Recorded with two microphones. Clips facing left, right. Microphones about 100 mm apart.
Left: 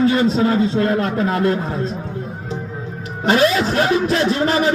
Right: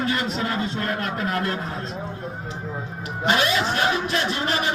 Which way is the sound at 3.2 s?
35° left (ahead or behind).